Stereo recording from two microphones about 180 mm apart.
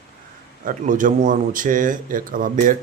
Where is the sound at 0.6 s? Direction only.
50° right (ahead or behind).